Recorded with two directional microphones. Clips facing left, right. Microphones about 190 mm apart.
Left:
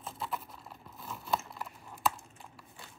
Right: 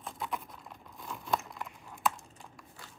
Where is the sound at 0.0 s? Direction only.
Centre (ahead or behind).